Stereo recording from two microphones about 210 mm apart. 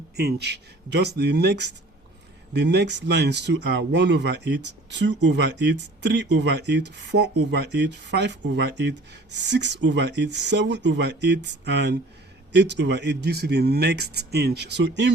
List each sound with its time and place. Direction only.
0.2 s speech: 50° right (ahead or behind)